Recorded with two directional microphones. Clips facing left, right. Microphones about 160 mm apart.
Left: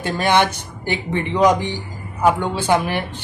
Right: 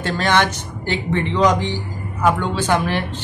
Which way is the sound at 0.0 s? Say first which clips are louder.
Left 1 dB; 15° left (ahead or behind).